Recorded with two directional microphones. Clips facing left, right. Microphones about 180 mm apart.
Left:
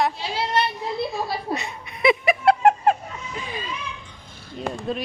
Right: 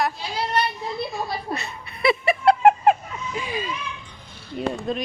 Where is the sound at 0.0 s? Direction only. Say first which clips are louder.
Left 1 dB; 25° left (ahead or behind).